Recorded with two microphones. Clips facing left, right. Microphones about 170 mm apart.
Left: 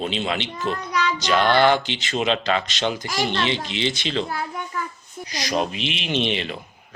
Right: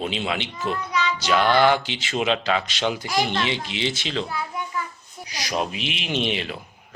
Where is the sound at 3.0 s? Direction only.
45° left (ahead or behind).